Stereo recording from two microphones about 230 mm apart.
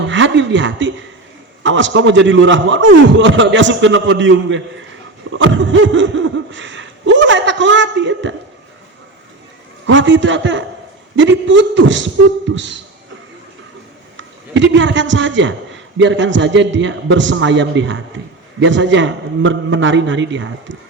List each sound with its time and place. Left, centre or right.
0.0 s a man's voice: right
9.8 s a man's voice: right
14.2 s a man's voice: right